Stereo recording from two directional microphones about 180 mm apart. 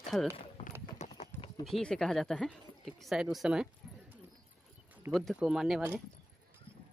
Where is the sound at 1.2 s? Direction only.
35° left (ahead or behind).